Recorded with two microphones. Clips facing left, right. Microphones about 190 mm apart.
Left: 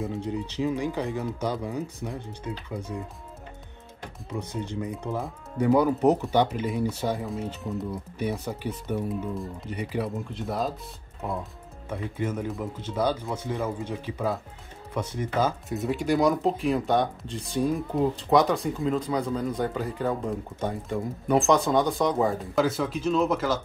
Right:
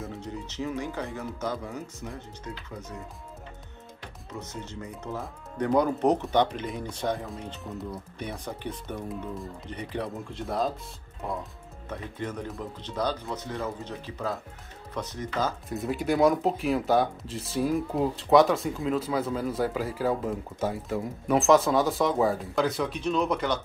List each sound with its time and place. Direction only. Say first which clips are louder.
0.0 s speech: left 6 dB; 15° left (ahead or behind)
4.4 s speech: left 7 dB; 15° left (ahead or behind)
12.2 s speech: left 5 dB; 5° left (ahead or behind)